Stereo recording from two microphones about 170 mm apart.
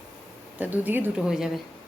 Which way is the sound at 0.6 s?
10° right (ahead or behind).